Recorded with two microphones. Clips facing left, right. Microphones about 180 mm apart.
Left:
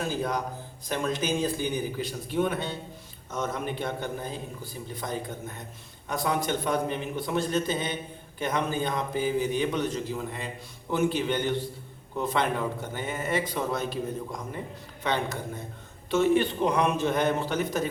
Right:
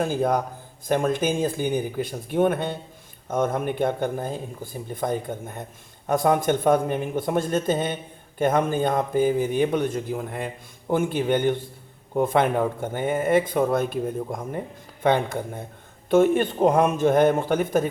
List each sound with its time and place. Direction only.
0.0 s a man's voice: 50° right (ahead or behind)